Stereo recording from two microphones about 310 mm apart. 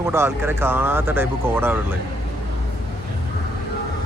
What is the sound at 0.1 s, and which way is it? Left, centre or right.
Speech, centre.